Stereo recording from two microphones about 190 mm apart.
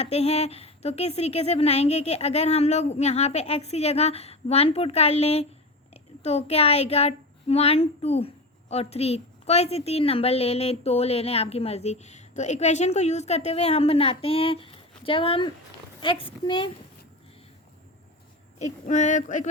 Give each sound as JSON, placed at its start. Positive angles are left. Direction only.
{"t": 0.0, "sound": "a woman's voice", "side_deg": 35}
{"t": 18.6, "sound": "a woman's voice", "side_deg": 40}